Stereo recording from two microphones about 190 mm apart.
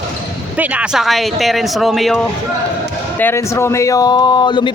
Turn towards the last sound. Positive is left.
turn(degrees=25)  # may be behind; listen again after turning